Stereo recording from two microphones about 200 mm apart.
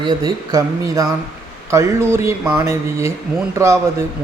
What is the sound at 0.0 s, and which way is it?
Speech, 20° right (ahead or behind).